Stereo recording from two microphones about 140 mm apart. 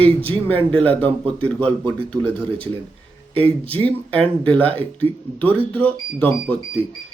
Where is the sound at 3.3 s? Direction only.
40° right (ahead or behind).